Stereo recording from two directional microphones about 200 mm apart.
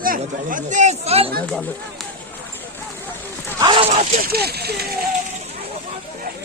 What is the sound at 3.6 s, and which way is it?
Dog, 25° right (ahead or behind).